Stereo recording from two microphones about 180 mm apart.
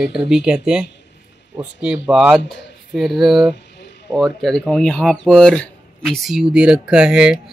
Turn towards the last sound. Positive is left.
turn(degrees=-5)  # may be behind; listen again after turning